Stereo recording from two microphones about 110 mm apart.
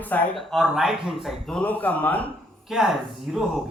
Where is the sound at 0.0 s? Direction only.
15° left (ahead or behind).